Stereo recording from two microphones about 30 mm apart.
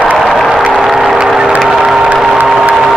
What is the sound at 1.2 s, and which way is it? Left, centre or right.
Music, right.